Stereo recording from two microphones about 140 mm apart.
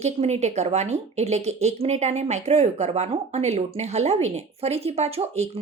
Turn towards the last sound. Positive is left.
turn(degrees=-50)  # may be behind; listen again after turning